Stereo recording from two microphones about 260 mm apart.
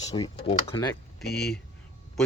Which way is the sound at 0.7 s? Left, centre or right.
Centre.